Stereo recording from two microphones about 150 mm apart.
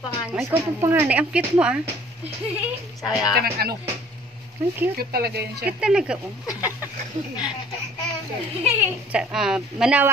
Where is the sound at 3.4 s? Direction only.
90° right.